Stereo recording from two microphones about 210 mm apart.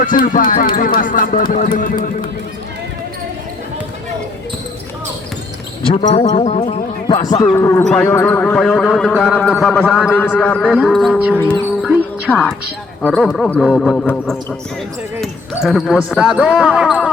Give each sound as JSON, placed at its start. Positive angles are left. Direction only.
{"t": 0.0, "sound": "speech", "side_deg": 40}
{"t": 5.9, "sound": "a man's voice", "side_deg": 30}
{"t": 7.9, "sound": "speech", "side_deg": 5}
{"t": 10.7, "sound": "speech", "side_deg": 0}
{"t": 11.8, "sound": "music", "side_deg": -5}
{"t": 12.3, "sound": "speech", "side_deg": 10}
{"t": 15.6, "sound": "speech", "side_deg": 0}